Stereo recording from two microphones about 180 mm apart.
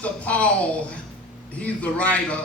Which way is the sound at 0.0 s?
5° left (ahead or behind).